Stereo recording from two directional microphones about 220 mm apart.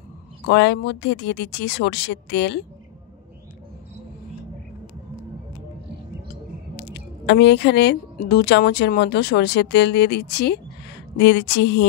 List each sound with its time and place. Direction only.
0.5 s speech: 50° left (ahead or behind)
6.8 s speech: 50° left (ahead or behind)